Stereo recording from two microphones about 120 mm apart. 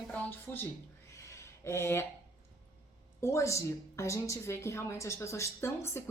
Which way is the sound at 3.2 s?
25° left (ahead or behind).